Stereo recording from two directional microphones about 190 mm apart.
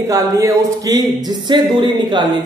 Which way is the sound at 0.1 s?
15° right (ahead or behind).